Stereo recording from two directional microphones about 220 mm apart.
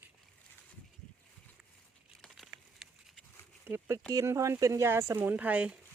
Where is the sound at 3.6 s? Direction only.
10° right (ahead or behind).